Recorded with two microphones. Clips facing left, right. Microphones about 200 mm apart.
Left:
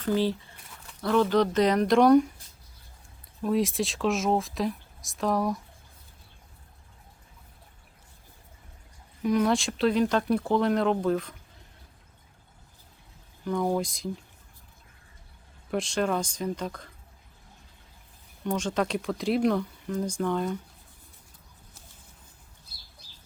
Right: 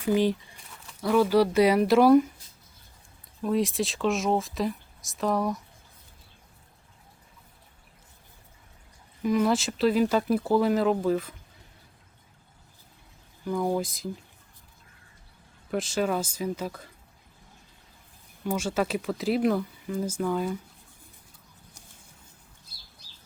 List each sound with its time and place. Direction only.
0.0 s speech: 15° right (ahead or behind)
3.4 s speech: centre (ahead or behind)
9.2 s speech: centre (ahead or behind)
13.4 s speech: 5° right (ahead or behind)
15.7 s speech: centre (ahead or behind)
18.4 s speech: 5° right (ahead or behind)